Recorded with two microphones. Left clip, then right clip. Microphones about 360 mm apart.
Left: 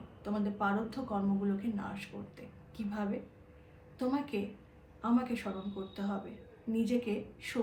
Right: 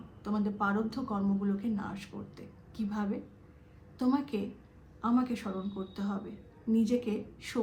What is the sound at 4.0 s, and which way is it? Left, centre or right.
Speech, centre.